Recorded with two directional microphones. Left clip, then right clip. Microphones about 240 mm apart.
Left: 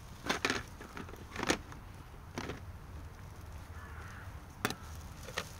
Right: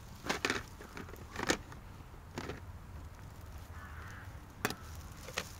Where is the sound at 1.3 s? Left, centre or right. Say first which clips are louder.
Left 1 dB; centre.